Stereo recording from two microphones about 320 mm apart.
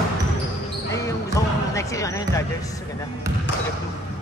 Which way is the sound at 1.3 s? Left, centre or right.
Centre.